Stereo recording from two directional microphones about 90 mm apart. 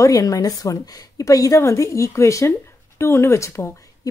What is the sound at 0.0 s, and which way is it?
A woman's voice, 40° left (ahead or behind).